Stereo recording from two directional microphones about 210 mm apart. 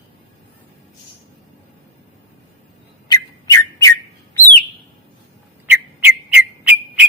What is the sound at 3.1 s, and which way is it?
Whistle, 15° left (ahead or behind).